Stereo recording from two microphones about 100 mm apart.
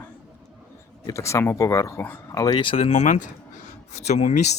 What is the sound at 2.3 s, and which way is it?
Speech, 45° left (ahead or behind).